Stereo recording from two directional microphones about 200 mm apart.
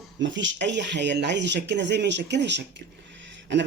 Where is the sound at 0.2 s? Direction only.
65° right (ahead or behind).